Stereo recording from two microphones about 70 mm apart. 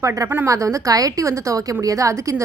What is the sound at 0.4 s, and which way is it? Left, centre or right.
A woman's voice, right.